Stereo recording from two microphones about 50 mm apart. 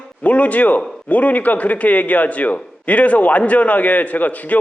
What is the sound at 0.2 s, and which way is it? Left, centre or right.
A man's voice, left.